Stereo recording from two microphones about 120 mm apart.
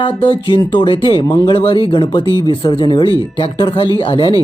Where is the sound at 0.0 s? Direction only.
40° left (ahead or behind).